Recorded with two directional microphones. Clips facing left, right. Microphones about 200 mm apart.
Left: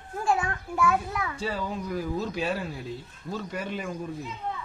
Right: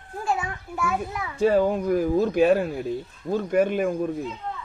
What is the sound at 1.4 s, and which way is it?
Speech, 55° right (ahead or behind).